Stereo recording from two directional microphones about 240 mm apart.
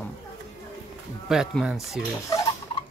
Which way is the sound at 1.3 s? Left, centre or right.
Centre.